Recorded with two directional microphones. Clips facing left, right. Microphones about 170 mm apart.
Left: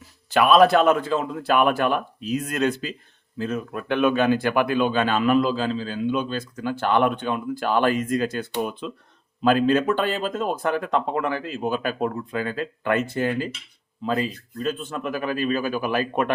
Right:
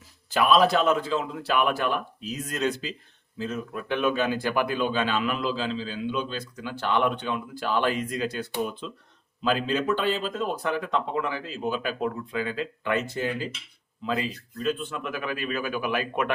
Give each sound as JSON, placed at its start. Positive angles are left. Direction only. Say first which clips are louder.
{"t": 0.3, "sound": "a man's voice", "louder": "left 5 dB", "side_deg": 60}
{"t": 14.0, "sound": "a man's voice", "louder": "left 4 dB", "side_deg": 40}